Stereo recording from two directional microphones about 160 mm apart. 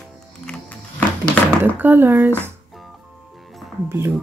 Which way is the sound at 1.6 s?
10° right (ahead or behind).